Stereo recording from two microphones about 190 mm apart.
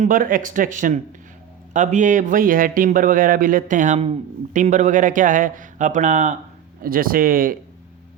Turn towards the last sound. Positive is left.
turn(degrees=-50)  # may be behind; listen again after turning